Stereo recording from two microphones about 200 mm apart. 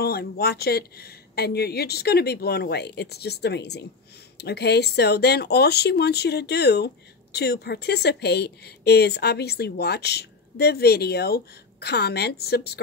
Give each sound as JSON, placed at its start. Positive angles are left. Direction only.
{"t": 0.0, "sound": "speech", "side_deg": 50}